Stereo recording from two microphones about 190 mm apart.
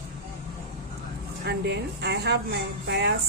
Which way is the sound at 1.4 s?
60° right (ahead or behind).